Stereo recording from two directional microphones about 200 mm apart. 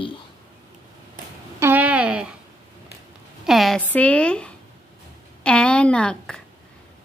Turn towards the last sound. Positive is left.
turn(degrees=5)  # may be behind; listen again after turning